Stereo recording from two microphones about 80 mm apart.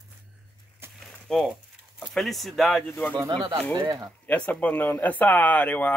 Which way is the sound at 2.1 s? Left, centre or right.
Centre.